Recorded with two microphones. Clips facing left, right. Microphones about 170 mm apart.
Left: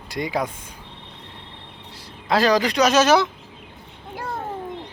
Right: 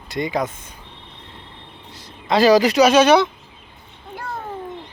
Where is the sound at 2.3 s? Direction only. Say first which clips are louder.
Right 5 dB; 5° right (ahead or behind).